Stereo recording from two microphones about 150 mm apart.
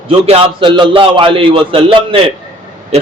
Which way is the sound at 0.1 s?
40° right (ahead or behind).